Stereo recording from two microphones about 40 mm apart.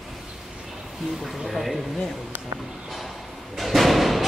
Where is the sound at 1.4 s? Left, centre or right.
Centre.